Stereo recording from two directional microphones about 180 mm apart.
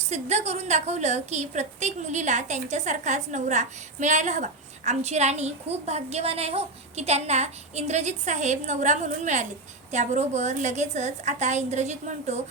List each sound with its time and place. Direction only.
0.1 s a woman's voice: 40° right (ahead or behind)